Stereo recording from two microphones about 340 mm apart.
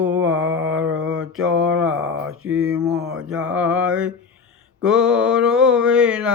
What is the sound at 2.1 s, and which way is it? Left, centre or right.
Mantra, right.